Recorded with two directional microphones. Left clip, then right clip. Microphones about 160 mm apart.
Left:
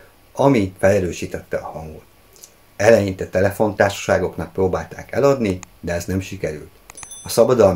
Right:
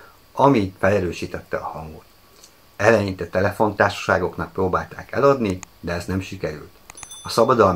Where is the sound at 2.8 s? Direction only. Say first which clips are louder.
Left 3 dB; 20° left (ahead or behind).